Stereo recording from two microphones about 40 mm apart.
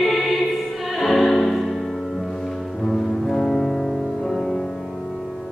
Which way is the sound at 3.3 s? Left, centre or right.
Left.